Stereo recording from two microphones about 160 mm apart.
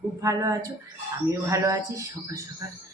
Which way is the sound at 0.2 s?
20° right (ahead or behind).